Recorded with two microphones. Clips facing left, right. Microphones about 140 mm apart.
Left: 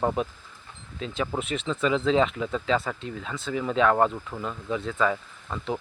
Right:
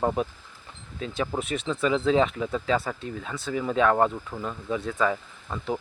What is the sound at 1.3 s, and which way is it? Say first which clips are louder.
Speech: even; 40° right (ahead or behind).